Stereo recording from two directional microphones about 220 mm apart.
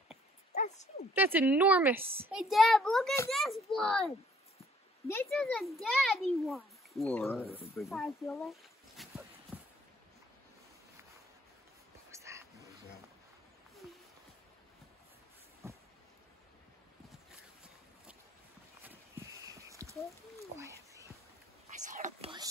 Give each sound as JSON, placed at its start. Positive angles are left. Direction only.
{"t": 1.1, "sound": "a child's voice", "side_deg": -10}
{"t": 5.0, "sound": "a child's voice", "side_deg": 10}
{"t": 5.3, "sound": "a child's voice", "side_deg": 0}
{"t": 7.2, "sound": "speech", "side_deg": 10}
{"t": 7.4, "sound": "speech", "side_deg": 25}
{"t": 7.7, "sound": "speech", "side_deg": 0}
{"t": 12.1, "sound": "dog", "side_deg": -15}
{"t": 15.6, "sound": "a sound", "side_deg": -10}
{"t": 18.8, "sound": "a sound", "side_deg": -10}
{"t": 21.7, "sound": "whispering", "side_deg": -35}